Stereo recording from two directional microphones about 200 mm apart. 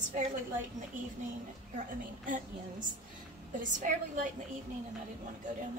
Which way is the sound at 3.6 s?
40° right (ahead or behind).